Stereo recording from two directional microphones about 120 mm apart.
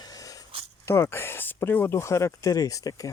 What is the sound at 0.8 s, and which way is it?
Speech, 20° left (ahead or behind).